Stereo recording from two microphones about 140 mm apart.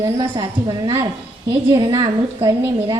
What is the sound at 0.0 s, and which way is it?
Speech, 25° right (ahead or behind).